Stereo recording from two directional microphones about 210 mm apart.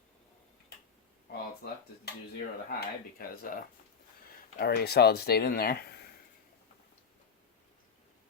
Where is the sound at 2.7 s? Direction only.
45° left (ahead or behind).